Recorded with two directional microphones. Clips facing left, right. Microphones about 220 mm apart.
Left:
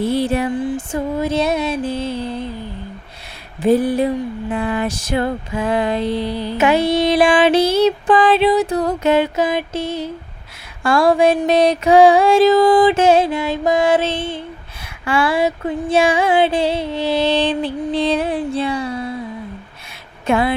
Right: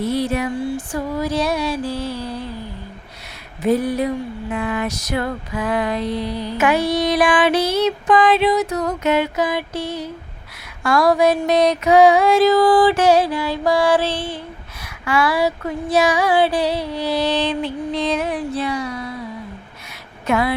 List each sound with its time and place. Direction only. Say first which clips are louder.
0.0 s a sound: left 3 dB; 30° left (ahead or behind)
0.5 s music: left 2 dB; 20° left (ahead or behind)
3.6 s music: left 3 dB; 30° left (ahead or behind)
20.2 s speech: left 2 dB; 30° left (ahead or behind)